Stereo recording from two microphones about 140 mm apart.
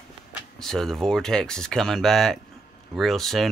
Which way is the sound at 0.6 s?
5° left (ahead or behind).